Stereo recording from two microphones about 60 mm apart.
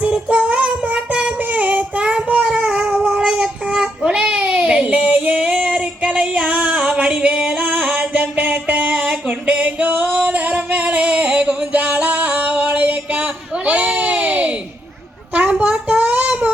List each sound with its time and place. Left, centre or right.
0.0 s child singing: right
10.7 s music: right
13.7 s a sound: right